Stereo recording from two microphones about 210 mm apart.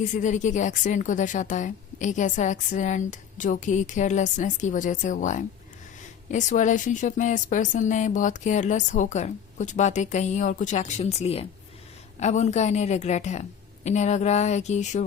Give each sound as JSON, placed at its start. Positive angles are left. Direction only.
{"t": 0.0, "sound": "a woman's voice", "side_deg": 35}